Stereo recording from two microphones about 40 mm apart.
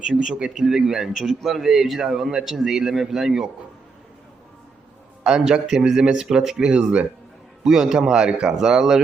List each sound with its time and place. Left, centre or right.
0.0 s a man's voice: right
5.2 s a man's voice: centre
6.7 s speech: right
7.6 s a man's voice: centre